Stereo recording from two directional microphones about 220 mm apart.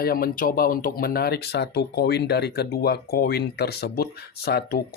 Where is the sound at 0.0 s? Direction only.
40° left (ahead or behind).